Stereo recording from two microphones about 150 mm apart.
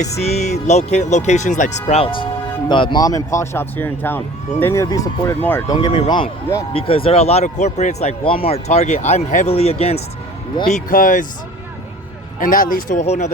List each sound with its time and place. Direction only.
0.0 s speech: 45° left (ahead or behind)
2.0 s a man's voice: 35° left (ahead or behind)
10.7 s speech: 60° left (ahead or behind)
12.4 s speech: 65° left (ahead or behind)
13.0 s speech: 50° left (ahead or behind)